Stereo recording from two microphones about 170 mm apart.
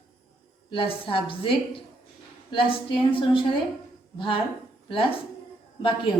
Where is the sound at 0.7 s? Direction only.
30° left (ahead or behind).